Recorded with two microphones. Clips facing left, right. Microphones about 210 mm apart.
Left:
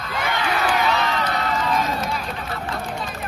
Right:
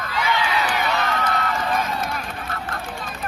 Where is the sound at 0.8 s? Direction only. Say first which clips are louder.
Left 2 dB; 55° right (ahead or behind).